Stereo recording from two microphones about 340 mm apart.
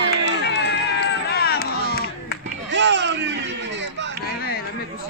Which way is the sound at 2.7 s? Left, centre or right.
Right.